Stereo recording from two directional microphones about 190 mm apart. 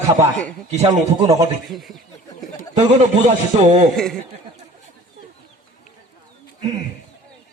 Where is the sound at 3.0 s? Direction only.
40° right (ahead or behind).